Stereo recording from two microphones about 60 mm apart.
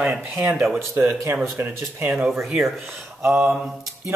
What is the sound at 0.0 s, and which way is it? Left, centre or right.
Speech, right.